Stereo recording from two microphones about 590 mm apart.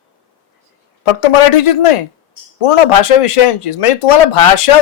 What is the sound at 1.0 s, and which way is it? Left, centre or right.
Speech, left.